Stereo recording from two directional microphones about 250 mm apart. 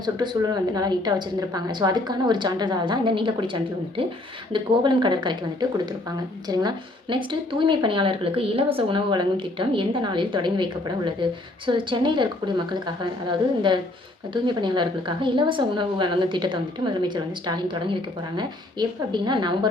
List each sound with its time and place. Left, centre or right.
0.0 s a woman's voice: centre